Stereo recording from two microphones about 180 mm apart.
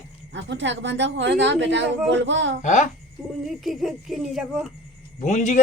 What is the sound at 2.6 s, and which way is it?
Speech, 40° left (ahead or behind).